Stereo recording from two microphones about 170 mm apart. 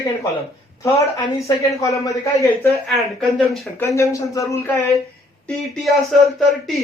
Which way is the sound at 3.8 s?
20° left (ahead or behind).